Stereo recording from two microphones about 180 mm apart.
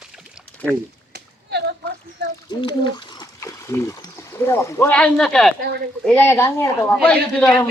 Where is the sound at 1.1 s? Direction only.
65° right (ahead or behind).